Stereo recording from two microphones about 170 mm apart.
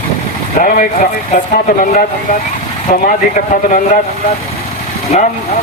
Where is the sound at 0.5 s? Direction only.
55° left (ahead or behind).